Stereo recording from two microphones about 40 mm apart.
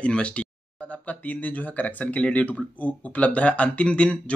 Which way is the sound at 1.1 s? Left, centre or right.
Left.